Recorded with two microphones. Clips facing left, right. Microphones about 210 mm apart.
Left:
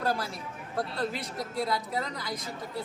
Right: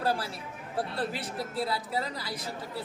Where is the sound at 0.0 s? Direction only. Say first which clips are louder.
Even; 30° right (ahead or behind).